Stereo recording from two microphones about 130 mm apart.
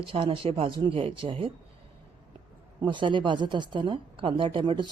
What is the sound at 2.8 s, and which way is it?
A woman's voice, 40° right (ahead or behind).